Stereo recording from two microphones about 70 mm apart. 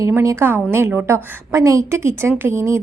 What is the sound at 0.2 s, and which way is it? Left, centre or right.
A woman's voice, right.